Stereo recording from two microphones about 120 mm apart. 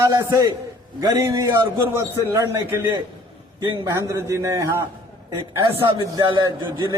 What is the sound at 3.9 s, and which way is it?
Speech, 25° right (ahead or behind).